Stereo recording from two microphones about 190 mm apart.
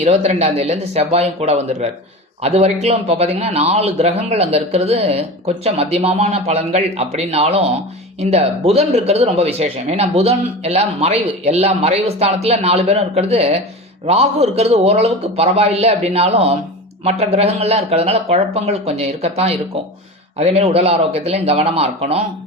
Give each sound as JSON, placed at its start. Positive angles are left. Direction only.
{"t": 0.0, "sound": "speech", "side_deg": -35}